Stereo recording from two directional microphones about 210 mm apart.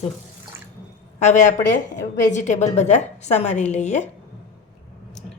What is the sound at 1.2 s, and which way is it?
A woman's voice, 35° left (ahead or behind).